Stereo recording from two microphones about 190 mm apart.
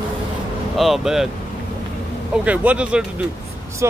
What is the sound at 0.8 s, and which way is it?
Speech, centre (ahead or behind).